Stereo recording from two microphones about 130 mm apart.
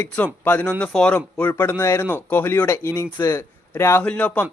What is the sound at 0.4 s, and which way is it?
A man's voice, 10° left (ahead or behind).